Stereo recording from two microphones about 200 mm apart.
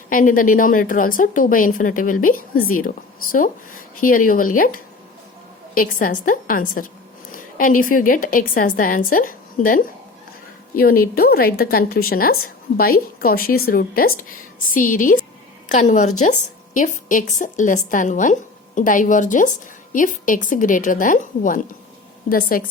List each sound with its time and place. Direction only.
0.1 s a woman's voice: 45° left (ahead or behind)